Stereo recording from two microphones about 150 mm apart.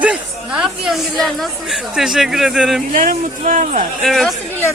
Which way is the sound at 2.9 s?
60° right (ahead or behind).